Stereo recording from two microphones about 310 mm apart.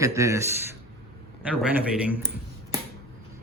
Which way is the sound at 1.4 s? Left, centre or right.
Centre.